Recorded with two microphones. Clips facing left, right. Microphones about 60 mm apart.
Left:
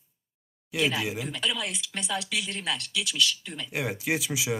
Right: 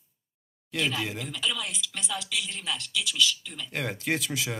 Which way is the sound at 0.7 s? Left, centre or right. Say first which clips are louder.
Left 2 dB; centre.